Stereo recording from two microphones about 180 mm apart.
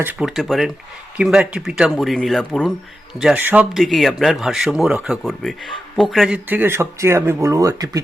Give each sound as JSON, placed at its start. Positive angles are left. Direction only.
{"t": 0.0, "sound": "speech", "side_deg": -5}